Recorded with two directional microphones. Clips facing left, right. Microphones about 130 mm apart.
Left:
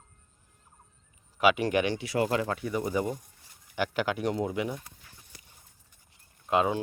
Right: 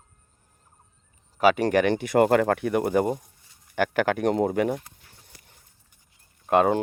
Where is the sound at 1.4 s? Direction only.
40° right (ahead or behind).